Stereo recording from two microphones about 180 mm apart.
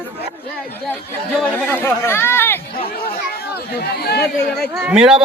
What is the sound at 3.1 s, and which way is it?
Speech, 60° left (ahead or behind).